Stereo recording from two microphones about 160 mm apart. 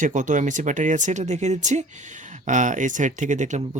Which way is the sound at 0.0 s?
50° right (ahead or behind).